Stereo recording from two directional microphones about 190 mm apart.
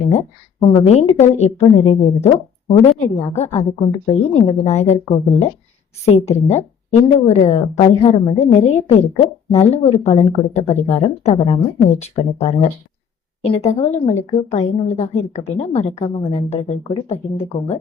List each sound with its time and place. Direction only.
0.1 s a woman's voice: 35° left (ahead or behind)